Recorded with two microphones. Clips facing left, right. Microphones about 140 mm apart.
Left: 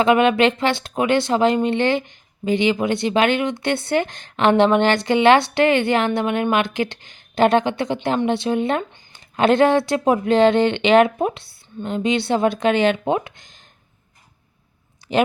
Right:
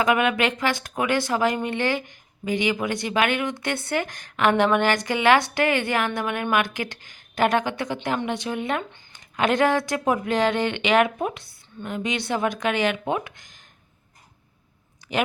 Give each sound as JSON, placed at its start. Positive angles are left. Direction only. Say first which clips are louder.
{"t": 0.0, "sound": "speech", "louder": "left 6 dB", "side_deg": 25}
{"t": 15.1, "sound": "speech", "louder": "left 6 dB", "side_deg": 30}